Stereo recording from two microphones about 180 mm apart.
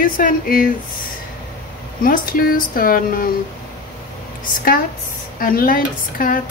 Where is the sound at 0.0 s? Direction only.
50° left (ahead or behind).